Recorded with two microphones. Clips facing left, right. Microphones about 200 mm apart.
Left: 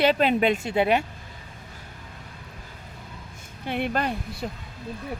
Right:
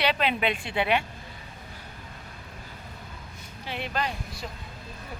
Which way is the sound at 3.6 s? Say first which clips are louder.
Left 5 dB; 55° left (ahead or behind).